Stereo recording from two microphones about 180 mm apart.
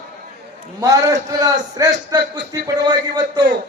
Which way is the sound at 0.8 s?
20° right (ahead or behind).